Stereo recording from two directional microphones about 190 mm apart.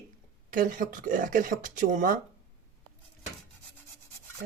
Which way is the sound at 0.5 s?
45° right (ahead or behind).